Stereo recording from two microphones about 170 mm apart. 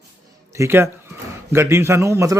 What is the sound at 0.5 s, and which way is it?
Speech, 15° right (ahead or behind).